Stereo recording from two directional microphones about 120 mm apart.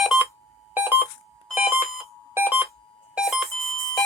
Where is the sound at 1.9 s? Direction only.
Centre (ahead or behind).